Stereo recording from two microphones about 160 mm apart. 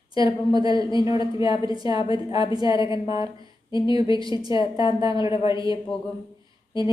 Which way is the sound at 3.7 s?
30° left (ahead or behind).